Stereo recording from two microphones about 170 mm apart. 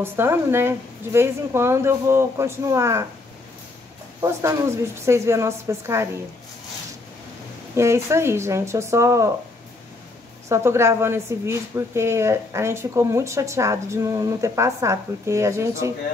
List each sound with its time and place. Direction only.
0.0 s a woman's voice: 15° right (ahead or behind)
4.2 s a woman's voice: 15° right (ahead or behind)
7.7 s a woman's voice: 15° right (ahead or behind)
10.5 s a woman's voice: 15° right (ahead or behind)